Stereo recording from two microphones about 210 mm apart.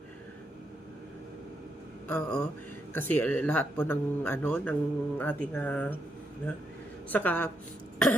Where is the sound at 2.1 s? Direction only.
5° left (ahead or behind).